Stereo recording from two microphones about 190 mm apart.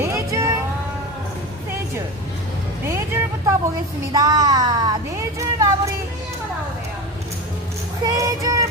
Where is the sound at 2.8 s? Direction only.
15° right (ahead or behind).